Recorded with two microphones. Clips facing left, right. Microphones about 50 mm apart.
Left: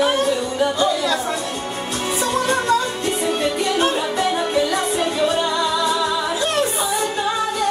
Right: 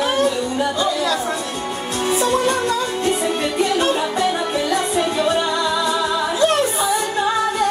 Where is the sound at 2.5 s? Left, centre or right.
Left.